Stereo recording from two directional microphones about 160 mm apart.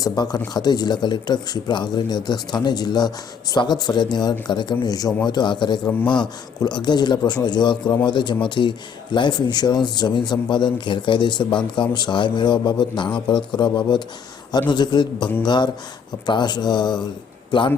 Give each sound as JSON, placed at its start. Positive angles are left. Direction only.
{"t": 0.0, "sound": "speech", "side_deg": 25}